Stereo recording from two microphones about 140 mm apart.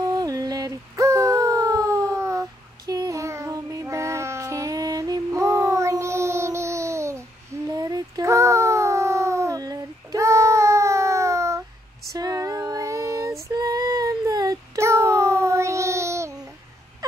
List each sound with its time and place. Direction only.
0.1 s humming: 25° right (ahead or behind)
2.9 s child singing: 25° right (ahead or behind)
12.1 s female singing: 25° right (ahead or behind)